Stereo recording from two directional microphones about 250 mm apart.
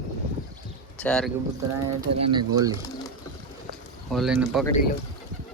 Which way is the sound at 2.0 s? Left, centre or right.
Right.